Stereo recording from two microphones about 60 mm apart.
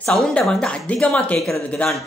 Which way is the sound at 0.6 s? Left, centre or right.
Centre.